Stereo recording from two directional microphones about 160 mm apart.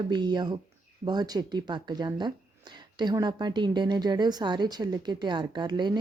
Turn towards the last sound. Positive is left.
turn(degrees=-30)  # may be behind; listen again after turning